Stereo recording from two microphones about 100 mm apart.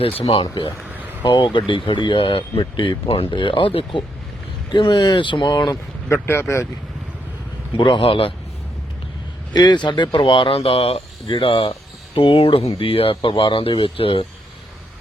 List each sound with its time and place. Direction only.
0.2 s speech: 70° left (ahead or behind)
1.2 s speech: 50° left (ahead or behind)
4.7 s speech: 50° left (ahead or behind)
6.2 s speech: 25° left (ahead or behind)
7.8 s speech: 55° left (ahead or behind)
9.5 s speech: 45° left (ahead or behind); by 11.0 s 85° left
11.3 s speech: 65° left (ahead or behind)